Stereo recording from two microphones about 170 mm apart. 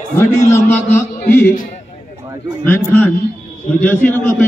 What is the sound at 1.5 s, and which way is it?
Speech, 50° left (ahead or behind).